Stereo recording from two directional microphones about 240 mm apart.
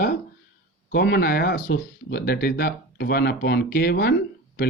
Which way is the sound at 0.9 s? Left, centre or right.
Left.